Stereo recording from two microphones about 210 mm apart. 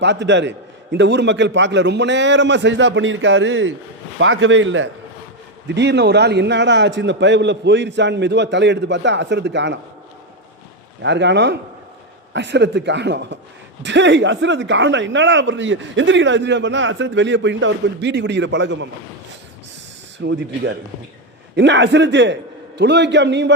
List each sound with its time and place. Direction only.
0.0 s speech: 55° right (ahead or behind)
11.0 s speech: 55° right (ahead or behind)
20.2 s speech: 55° right (ahead or behind)
21.5 s speech: 55° right (ahead or behind)